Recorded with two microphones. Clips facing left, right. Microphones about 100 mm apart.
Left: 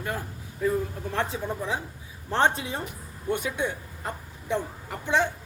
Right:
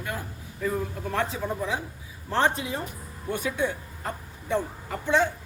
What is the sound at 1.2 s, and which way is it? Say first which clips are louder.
A woman's voice: right 1 dB; 30° left (ahead or behind).